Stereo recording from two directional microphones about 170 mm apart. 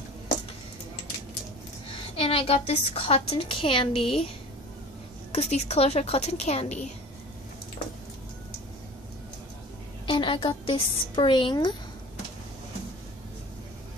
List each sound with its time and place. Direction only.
2.1 s a woman's voice: 35° left (ahead or behind)
5.3 s a woman's voice: 40° left (ahead or behind)
10.0 s a woman's voice: 30° left (ahead or behind)